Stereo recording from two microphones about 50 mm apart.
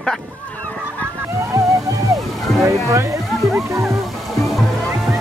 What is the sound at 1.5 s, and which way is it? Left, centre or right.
Music, right.